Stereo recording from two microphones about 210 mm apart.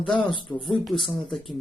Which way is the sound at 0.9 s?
Centre (ahead or behind).